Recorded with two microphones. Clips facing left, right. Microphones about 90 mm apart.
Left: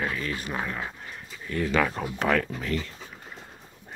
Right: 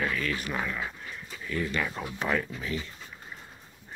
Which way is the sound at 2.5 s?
55° left (ahead or behind).